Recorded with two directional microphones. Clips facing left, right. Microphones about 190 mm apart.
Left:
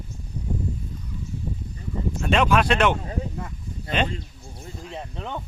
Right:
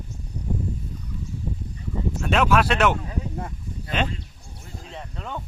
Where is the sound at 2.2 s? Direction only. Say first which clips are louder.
Even; 5° right (ahead or behind).